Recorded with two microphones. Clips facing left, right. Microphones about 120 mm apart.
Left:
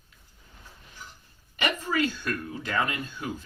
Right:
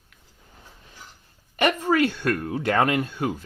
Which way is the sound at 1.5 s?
55° right (ahead or behind).